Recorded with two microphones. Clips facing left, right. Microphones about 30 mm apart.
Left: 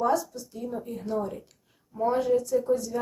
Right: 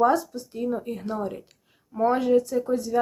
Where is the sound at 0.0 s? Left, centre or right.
Right.